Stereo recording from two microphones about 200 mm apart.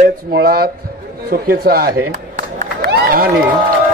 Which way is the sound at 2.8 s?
50° right (ahead or behind).